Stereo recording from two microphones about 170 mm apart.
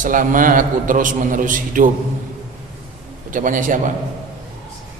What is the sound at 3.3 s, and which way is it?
Speech, 50° right (ahead or behind).